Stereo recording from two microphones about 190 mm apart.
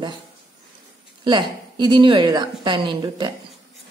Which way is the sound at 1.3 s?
25° right (ahead or behind).